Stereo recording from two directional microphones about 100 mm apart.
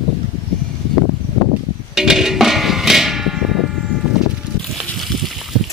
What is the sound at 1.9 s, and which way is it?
Music, 5° right (ahead or behind).